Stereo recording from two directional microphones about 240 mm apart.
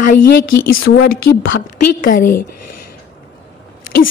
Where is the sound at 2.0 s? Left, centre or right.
Left.